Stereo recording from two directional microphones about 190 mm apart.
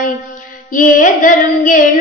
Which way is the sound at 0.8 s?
45° left (ahead or behind).